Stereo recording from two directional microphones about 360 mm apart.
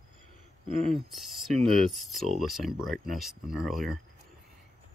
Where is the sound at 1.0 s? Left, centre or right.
Centre.